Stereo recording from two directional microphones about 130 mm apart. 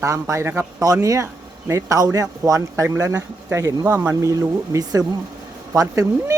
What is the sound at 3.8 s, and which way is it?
Speech, 15° right (ahead or behind).